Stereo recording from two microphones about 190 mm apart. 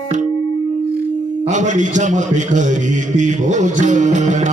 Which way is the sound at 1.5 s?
40° right (ahead or behind).